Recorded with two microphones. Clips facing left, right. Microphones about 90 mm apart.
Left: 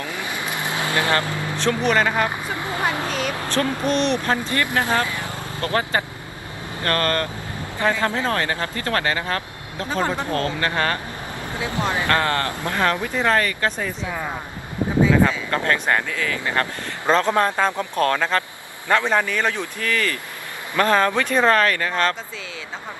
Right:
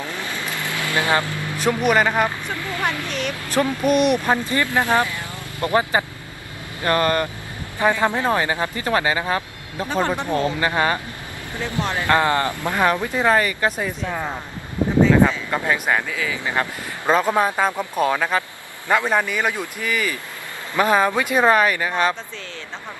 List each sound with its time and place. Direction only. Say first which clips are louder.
0.1 s vehicle: left 1 dB; 15° left (ahead or behind)
0.9 s speech: right 1 dB; 20° right (ahead or behind)
1.6 s speech: right 2 dB; 10° right (ahead or behind)
2.2 s speech: even; 20° left (ahead or behind)
3.1 s speech: left 2 dB; 40° left (ahead or behind)
3.9 s speech: right 4 dB; 10° right (ahead or behind)
11.5 s speech: left 1 dB; 20° left (ahead or behind)
12.1 s speech: right 6 dB; 15° right (ahead or behind)
15.2 s speech: even; 10° right (ahead or behind)